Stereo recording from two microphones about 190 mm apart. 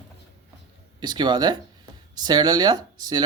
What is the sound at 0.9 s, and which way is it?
Speech, 25° right (ahead or behind).